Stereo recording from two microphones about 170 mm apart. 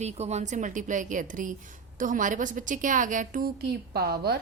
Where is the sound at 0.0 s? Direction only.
40° right (ahead or behind); by 4.4 s 70° right (ahead or behind).